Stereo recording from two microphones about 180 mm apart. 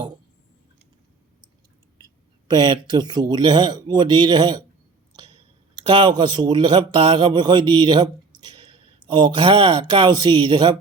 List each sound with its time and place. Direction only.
2.5 s speech: 25° right (ahead or behind)
5.7 s speech: 25° right (ahead or behind)